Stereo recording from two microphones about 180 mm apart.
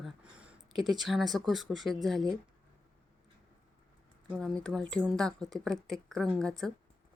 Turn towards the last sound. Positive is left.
turn(degrees=5)  # may be behind; listen again after turning